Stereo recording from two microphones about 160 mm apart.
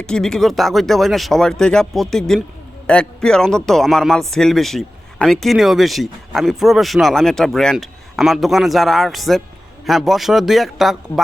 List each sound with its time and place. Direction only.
0.0 s a man's voice: 5° left (ahead or behind)